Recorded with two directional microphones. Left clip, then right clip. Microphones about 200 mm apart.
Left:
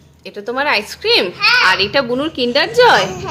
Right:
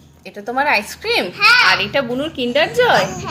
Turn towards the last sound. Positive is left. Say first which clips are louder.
# left 4 dB
turn(degrees=25)  # may be behind; listen again after turning